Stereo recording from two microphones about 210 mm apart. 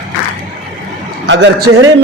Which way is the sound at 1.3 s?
55° right (ahead or behind).